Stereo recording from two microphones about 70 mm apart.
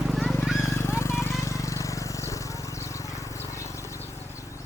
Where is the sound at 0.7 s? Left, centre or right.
Left.